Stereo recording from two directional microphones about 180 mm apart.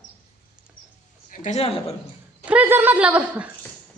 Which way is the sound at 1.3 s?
45° left (ahead or behind).